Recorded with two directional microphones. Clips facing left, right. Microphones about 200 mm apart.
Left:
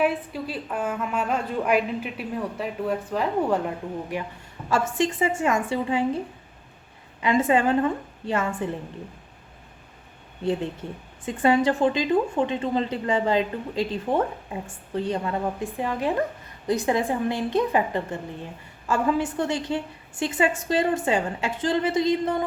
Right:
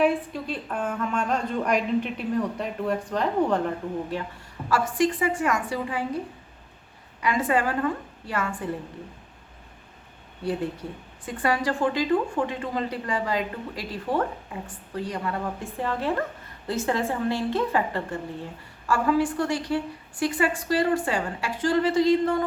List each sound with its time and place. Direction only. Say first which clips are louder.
0.0 s a woman's voice: right 1 dB; 5° left (ahead or behind); by 6.1 s 25° left (ahead or behind)
7.2 s a woman's voice: left 3 dB; 25° left (ahead or behind)
10.4 s a woman's voice: left 2 dB; 25° left (ahead or behind)